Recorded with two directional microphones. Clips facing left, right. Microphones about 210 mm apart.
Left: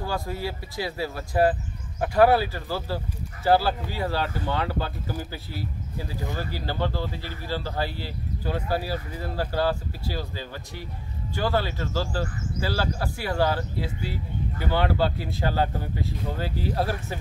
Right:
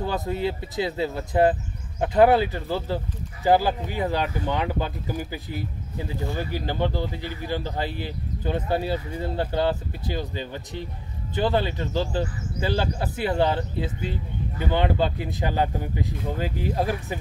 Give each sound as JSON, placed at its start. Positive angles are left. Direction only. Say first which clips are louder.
{"t": 0.0, "sound": "speech", "louder": "right 4 dB", "side_deg": -20}